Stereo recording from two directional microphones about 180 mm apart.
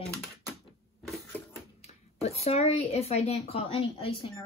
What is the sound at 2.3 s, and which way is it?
Speech, 35° left (ahead or behind).